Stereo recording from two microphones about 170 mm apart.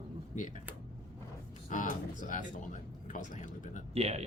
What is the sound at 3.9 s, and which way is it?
Speech, 40° right (ahead or behind).